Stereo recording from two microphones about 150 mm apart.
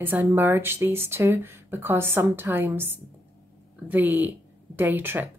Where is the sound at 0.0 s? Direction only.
15° right (ahead or behind).